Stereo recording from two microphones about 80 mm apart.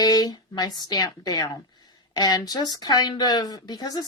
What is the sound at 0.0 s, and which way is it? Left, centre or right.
A woman's voice, left.